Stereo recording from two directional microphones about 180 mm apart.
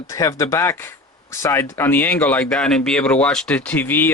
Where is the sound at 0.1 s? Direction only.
20° left (ahead or behind).